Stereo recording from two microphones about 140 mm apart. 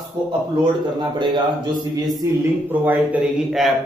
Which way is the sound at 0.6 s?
35° right (ahead or behind).